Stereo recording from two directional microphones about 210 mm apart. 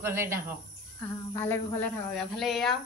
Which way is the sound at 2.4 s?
Centre (ahead or behind).